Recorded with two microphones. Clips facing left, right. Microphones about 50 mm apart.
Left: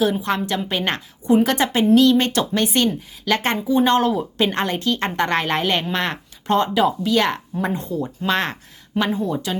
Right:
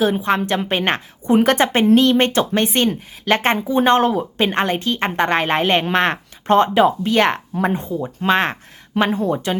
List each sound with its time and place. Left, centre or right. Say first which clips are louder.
0.0 s speech: right 3 dB; right
9.0 s a woman's voice: right 3 dB; right